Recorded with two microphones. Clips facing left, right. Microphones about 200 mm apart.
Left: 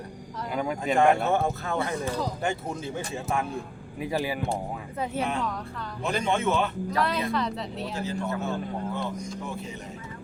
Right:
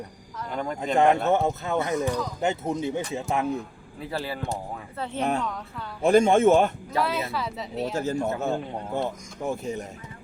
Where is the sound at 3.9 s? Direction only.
15° left (ahead or behind).